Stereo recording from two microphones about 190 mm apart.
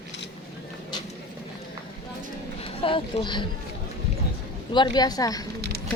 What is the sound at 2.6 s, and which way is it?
Speech, 30° left (ahead or behind).